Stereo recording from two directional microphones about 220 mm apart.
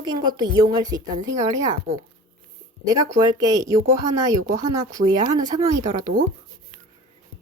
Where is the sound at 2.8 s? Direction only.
15° right (ahead or behind).